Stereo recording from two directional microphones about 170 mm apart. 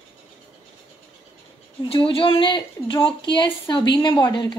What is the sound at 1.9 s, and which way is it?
Speech, 30° left (ahead or behind).